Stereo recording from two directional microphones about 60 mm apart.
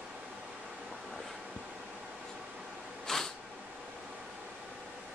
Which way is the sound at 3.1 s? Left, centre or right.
Centre.